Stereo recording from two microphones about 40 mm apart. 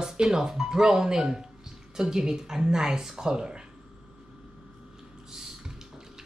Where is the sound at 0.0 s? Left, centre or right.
Centre.